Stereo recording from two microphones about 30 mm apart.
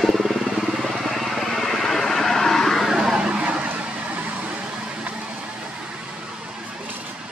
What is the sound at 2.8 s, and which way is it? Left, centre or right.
Vehicle, centre.